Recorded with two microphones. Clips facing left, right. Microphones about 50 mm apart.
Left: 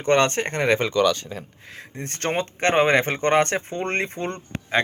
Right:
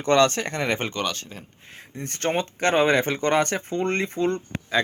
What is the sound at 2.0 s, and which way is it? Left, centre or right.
Speech, left.